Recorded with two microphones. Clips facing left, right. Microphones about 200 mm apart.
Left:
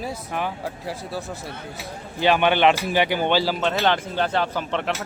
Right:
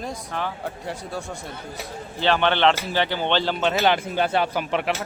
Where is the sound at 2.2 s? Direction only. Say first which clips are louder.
Left 2 dB; 15° left (ahead or behind); by 4.9 s 10° right (ahead or behind).